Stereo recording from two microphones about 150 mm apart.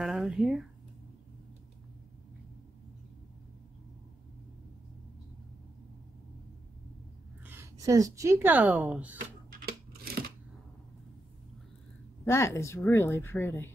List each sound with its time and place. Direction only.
0.0 s speech: 5° right (ahead or behind)
7.4 s speech: 15° right (ahead or behind)
9.5 s scissors: 90° right
12.3 s a woman's voice: 20° left (ahead or behind)